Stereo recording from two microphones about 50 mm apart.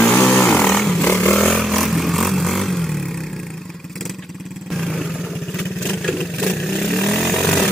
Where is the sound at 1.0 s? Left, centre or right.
Left.